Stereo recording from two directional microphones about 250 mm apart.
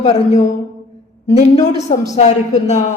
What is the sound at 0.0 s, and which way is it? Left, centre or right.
A woman's voice, left.